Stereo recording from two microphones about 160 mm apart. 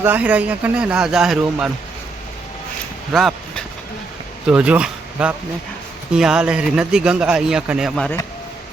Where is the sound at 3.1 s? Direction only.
Centre (ahead or behind).